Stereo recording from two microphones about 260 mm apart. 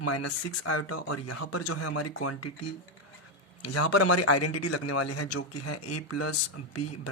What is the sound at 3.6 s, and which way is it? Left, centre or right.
Speech, left.